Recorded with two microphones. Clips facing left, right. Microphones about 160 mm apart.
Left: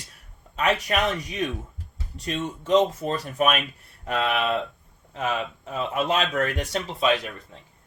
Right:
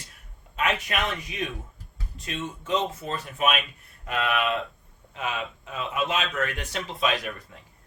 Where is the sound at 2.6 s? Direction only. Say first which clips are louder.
Left 8 dB; 40° left (ahead or behind).